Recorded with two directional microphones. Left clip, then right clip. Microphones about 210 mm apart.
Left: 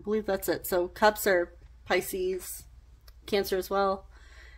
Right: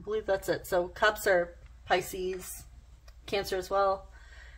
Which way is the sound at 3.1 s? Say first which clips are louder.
Left 4 dB; 35° left (ahead or behind).